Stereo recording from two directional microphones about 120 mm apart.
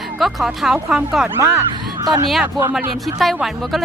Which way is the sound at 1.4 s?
25° right (ahead or behind).